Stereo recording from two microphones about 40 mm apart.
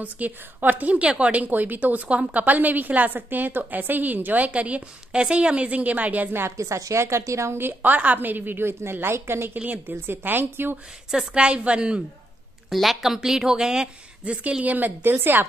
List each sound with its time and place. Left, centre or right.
0.0 s a woman's voice: right
1.4 s a woman's voice: right
4.5 s a woman's voice: right
5.1 s a woman's voice: right
5.7 s a woman's voice: right
7.2 s a woman's voice: right
7.8 s a woman's voice: right
9.8 s a woman's voice: right
11.1 s a woman's voice: right
12.6 s a sound: centre
13.0 s speech: centre
14.2 s a woman's voice: right
14.6 s a woman's voice: right
15.1 s a woman's voice: right